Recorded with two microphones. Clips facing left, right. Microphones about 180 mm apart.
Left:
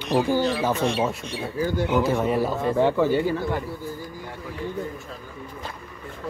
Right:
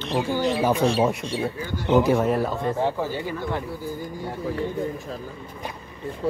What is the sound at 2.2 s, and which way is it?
Speech, centre (ahead or behind).